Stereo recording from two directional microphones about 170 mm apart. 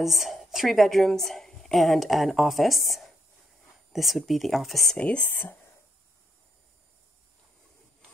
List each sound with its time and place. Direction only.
0.0 s a woman's voice: centre (ahead or behind)